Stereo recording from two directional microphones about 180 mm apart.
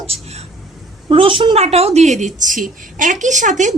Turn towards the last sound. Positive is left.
turn(degrees=-40)  # may be behind; listen again after turning